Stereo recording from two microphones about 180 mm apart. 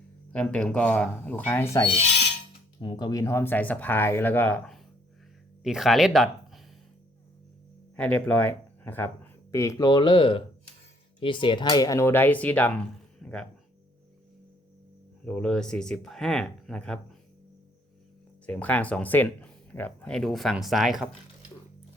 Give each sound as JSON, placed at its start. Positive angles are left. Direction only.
{"t": 0.3, "sound": "speech", "side_deg": 5}
{"t": 7.9, "sound": "speech", "side_deg": 5}
{"t": 15.2, "sound": "speech", "side_deg": 5}
{"t": 18.4, "sound": "speech", "side_deg": 10}